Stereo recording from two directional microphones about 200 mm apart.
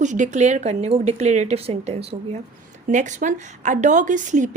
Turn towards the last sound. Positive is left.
turn(degrees=-40)  # may be behind; listen again after turning